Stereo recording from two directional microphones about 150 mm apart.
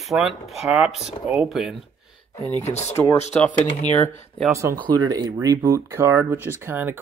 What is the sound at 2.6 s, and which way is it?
Speech, 45° left (ahead or behind).